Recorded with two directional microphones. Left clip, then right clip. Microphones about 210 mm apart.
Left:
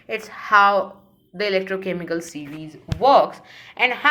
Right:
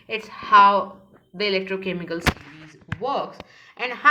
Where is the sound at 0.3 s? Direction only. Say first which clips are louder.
Right 1 dB; 20° left (ahead or behind).